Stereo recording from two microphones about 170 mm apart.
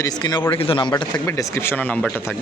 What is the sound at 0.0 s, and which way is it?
Speech, 25° left (ahead or behind).